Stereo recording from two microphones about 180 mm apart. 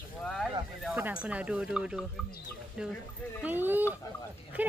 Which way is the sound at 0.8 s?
5° right (ahead or behind).